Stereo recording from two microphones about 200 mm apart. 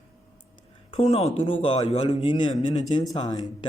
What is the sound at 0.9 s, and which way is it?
Speech, 30° left (ahead or behind).